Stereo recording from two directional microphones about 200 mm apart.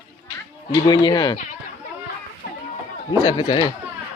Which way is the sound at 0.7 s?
20° left (ahead or behind).